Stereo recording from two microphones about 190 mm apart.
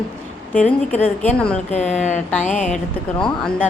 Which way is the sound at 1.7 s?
35° left (ahead or behind).